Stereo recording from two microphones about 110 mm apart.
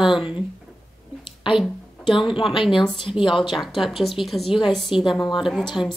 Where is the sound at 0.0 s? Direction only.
5° right (ahead or behind).